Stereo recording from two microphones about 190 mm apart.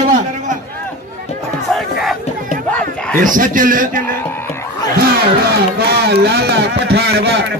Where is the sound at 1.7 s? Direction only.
5° left (ahead or behind).